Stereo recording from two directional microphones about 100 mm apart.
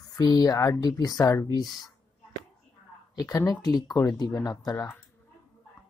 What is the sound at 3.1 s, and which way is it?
Speech, 35° left (ahead or behind).